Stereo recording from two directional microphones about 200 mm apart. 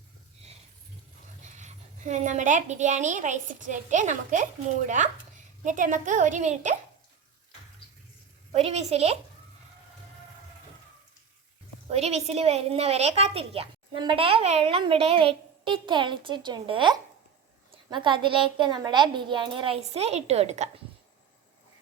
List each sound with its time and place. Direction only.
1.5 s a woman's voice: 35° right (ahead or behind)
8.5 s a woman's voice: 30° right (ahead or behind)
11.9 s a woman's voice: 30° right (ahead or behind)